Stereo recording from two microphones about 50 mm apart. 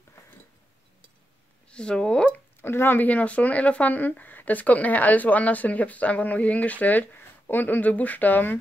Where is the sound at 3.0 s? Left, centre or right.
Left.